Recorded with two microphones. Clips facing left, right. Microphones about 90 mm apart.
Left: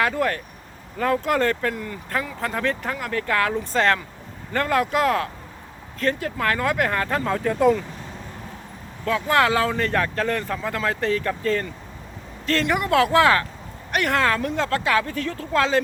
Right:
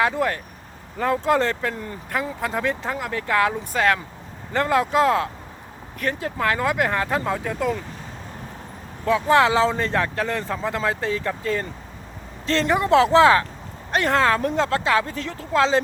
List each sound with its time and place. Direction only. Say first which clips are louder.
0.0 s speech: right 1 dB; 20° right (ahead or behind)
2.4 s speech: even; 15° right (ahead or behind)
4.5 s speech: right 2 dB; 20° right (ahead or behind)
9.0 s speech: right 2 dB; 20° right (ahead or behind)